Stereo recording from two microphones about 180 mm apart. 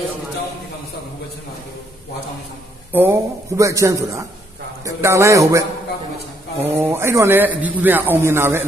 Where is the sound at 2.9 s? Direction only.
10° right (ahead or behind).